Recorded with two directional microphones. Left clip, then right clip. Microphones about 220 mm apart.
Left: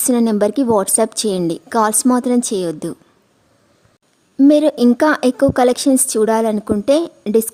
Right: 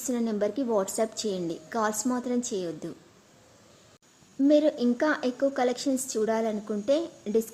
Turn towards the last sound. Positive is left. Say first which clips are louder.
# left 11 dB
turn(degrees=50)  # may be behind; listen again after turning